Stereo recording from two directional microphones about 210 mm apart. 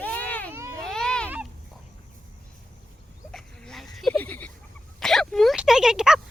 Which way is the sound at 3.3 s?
5° left (ahead or behind).